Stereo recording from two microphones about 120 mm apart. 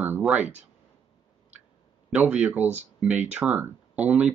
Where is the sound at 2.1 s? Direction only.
10° right (ahead or behind).